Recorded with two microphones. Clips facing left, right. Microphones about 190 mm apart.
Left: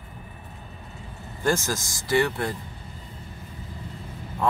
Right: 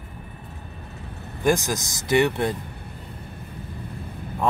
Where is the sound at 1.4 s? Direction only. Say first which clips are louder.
Right 3 dB; 15° right (ahead or behind).